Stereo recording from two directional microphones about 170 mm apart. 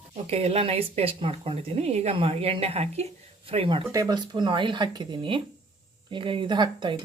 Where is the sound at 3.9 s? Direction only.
20° right (ahead or behind).